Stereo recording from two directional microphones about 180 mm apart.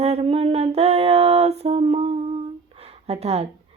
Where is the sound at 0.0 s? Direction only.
35° right (ahead or behind).